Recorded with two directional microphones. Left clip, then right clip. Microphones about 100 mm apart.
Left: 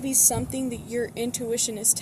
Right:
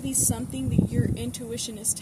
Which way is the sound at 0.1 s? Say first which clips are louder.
Left 6 dB; 40° right (ahead or behind).